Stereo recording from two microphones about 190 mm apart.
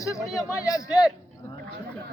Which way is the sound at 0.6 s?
20° left (ahead or behind).